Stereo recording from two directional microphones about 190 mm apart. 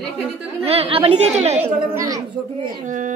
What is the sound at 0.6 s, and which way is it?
Speech, 30° right (ahead or behind).